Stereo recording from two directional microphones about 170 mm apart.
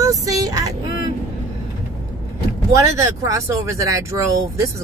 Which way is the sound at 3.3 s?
20° right (ahead or behind).